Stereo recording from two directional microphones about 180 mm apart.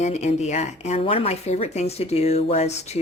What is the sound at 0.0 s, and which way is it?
Speech, 40° left (ahead or behind).